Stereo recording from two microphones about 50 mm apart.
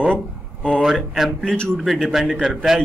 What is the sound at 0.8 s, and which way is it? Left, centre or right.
Speech, centre.